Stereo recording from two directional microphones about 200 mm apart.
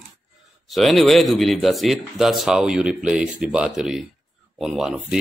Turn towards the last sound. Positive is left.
turn(degrees=0)  # may be behind; listen again after turning